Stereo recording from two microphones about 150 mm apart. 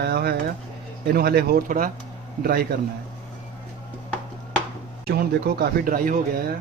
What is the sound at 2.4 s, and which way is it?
Speech, 90° right.